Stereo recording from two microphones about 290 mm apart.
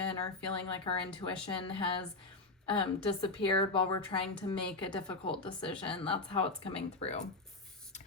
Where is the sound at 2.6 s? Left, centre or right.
Centre.